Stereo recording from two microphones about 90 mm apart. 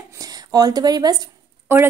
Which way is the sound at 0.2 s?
45° right (ahead or behind).